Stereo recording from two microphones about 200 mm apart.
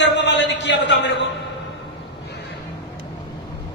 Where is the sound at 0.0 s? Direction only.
60° left (ahead or behind).